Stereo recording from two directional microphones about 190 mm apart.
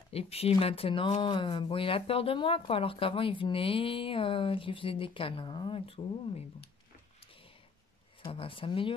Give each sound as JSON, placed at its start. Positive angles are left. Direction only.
{"t": 0.1, "sound": "speech", "side_deg": 30}
{"t": 8.2, "sound": "speech", "side_deg": 30}